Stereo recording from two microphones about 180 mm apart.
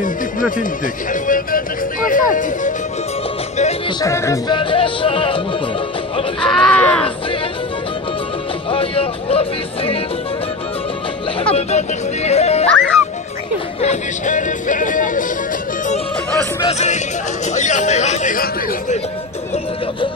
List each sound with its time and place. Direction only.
0.0 s music: 45° left (ahead or behind)
4.0 s music: 15° left (ahead or behind)
4.6 s music: 30° left (ahead or behind)
6.4 s speech: 5° left (ahead or behind)
8.6 s music: 30° left (ahead or behind)
11.4 s speech: 35° left (ahead or behind)
13.7 s speech: 40° left (ahead or behind)
16.6 s speech: 40° left (ahead or behind)